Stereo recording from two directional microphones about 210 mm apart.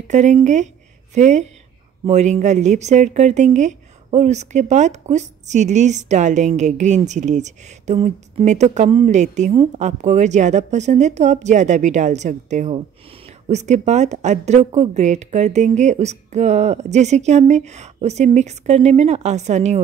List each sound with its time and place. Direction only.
0.1 s speech: 35° right (ahead or behind)